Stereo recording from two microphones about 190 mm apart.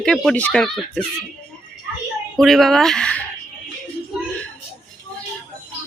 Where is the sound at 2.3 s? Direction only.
Centre (ahead or behind).